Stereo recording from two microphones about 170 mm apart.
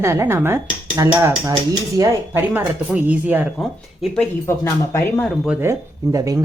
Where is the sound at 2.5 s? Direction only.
10° right (ahead or behind); by 5.3 s 15° left (ahead or behind).